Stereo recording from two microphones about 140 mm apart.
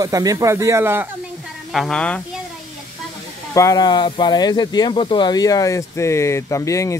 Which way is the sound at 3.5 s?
25° left (ahead or behind).